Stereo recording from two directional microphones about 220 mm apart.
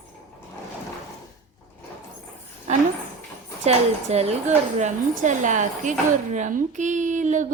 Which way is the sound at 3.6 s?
30° right (ahead or behind).